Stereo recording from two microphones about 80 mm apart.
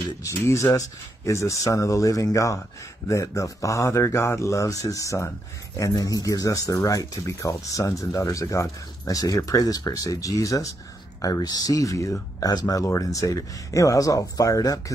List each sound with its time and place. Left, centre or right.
0.2 s speech: left